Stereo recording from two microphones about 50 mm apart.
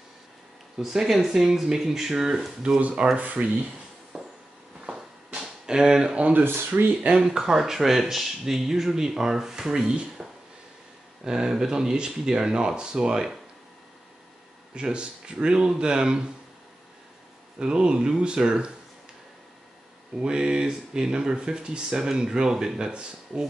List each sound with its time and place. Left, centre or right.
0.7 s speech: centre
3.2 s speech: right
4.1 s a sound: centre
6.7 s speech: right
7.1 s speech: centre
11.2 s speech: centre
14.7 s speech: centre
17.6 s speech: centre
20.2 s speech: centre